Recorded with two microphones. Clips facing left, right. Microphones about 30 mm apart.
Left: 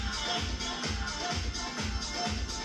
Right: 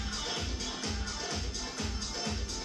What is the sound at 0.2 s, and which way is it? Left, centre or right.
Music, centre.